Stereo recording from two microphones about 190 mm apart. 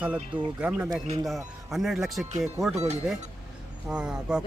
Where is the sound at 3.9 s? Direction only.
5° right (ahead or behind).